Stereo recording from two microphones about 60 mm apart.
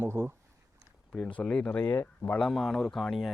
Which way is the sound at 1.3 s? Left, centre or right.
Centre.